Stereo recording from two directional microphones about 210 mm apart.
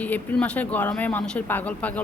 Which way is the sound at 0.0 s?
10° left (ahead or behind).